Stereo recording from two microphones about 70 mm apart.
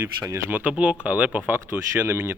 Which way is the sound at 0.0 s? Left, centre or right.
Right.